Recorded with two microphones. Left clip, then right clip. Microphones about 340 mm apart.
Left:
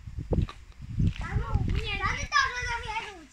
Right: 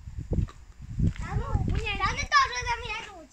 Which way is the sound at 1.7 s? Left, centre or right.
Centre.